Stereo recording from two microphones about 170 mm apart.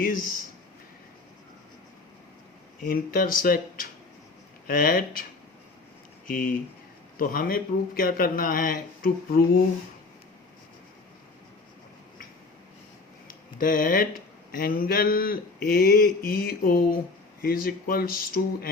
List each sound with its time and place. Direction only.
0.0 s speech: 55° left (ahead or behind)
2.8 s speech: 55° left (ahead or behind)
6.2 s speech: 55° left (ahead or behind)
13.2 s speech: 55° left (ahead or behind)